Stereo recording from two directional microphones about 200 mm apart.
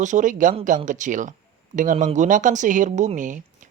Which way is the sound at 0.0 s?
40° right (ahead or behind).